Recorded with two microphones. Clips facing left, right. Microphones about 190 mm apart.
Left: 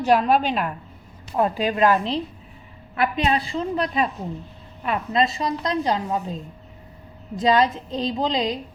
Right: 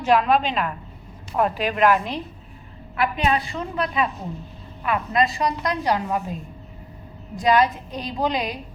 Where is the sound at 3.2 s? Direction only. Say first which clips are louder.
Left 1 dB; 30° left (ahead or behind).